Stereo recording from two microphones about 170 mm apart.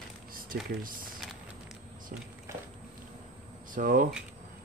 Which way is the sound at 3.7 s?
55° right (ahead or behind).